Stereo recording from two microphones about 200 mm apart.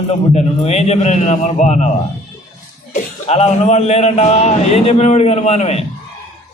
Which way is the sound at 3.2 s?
30° left (ahead or behind).